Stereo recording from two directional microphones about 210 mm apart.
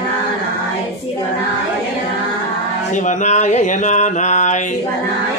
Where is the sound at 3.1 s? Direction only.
35° left (ahead or behind).